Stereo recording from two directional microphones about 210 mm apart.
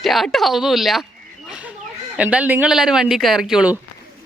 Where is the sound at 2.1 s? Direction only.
5° right (ahead or behind).